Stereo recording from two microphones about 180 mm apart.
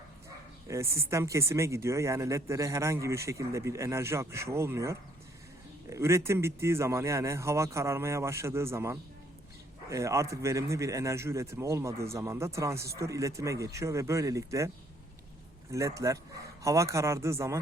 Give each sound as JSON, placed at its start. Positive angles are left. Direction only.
{"t": 0.7, "sound": "speech", "side_deg": -15}
{"t": 15.7, "sound": "speech", "side_deg": -15}